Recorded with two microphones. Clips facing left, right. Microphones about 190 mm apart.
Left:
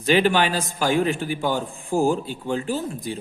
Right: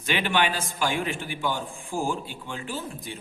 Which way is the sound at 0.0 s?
40° left (ahead or behind).